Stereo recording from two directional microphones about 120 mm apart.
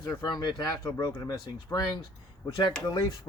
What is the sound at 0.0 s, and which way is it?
Speech, 35° left (ahead or behind).